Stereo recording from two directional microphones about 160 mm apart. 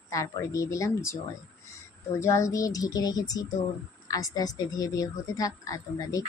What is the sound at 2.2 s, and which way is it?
A woman's voice, 20° left (ahead or behind).